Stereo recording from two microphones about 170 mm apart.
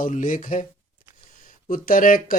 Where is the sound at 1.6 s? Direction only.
55° left (ahead or behind).